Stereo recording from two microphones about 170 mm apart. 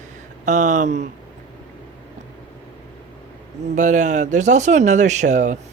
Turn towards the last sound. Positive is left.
turn(degrees=-45)  # may be behind; listen again after turning